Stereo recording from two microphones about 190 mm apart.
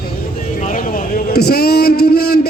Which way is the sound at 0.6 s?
45° left (ahead or behind).